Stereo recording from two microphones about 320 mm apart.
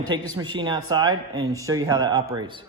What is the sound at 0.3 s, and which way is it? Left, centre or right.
Speech, centre.